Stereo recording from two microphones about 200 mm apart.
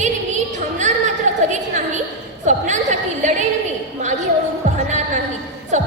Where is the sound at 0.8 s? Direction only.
35° right (ahead or behind).